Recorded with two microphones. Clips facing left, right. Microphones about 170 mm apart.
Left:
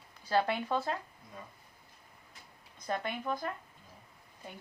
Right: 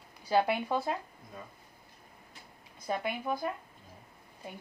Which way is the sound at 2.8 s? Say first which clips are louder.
Right 2 dB; 10° right (ahead or behind).